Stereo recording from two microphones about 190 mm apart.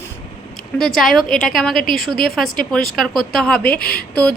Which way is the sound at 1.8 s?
45° left (ahead or behind).